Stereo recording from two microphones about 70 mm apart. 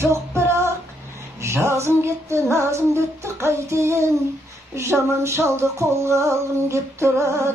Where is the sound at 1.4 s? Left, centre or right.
Right.